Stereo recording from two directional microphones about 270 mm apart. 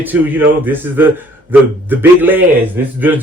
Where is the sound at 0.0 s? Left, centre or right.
Centre.